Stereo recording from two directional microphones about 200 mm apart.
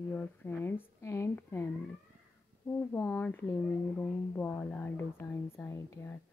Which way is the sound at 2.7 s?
10° left (ahead or behind).